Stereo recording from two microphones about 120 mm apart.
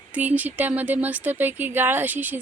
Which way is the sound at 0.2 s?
15° right (ahead or behind).